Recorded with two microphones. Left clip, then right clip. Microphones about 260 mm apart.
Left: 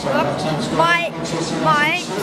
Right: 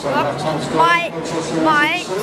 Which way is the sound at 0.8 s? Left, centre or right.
Centre.